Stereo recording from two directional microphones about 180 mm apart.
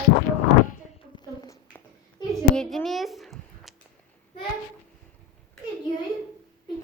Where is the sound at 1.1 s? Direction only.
25° left (ahead or behind).